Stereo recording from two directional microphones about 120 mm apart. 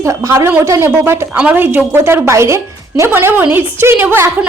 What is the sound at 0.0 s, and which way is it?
A woman's voice, 25° right (ahead or behind).